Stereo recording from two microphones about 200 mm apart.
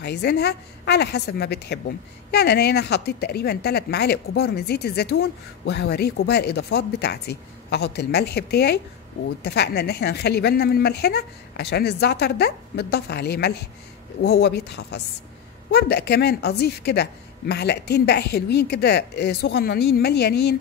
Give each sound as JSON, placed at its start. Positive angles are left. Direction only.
{"t": 0.0, "sound": "a woman's voice", "side_deg": 55}